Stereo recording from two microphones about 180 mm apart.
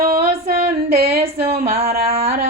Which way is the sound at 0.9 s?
60° right (ahead or behind).